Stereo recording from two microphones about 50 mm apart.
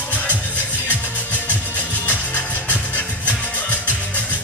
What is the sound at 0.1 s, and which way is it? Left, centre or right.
Music, left.